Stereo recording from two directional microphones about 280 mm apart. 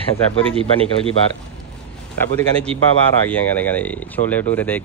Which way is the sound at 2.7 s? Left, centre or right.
Centre.